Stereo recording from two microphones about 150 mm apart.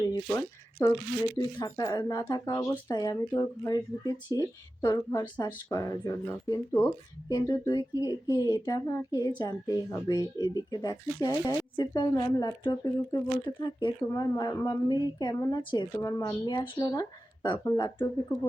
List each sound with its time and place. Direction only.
0.1 s speech: 20° left (ahead or behind)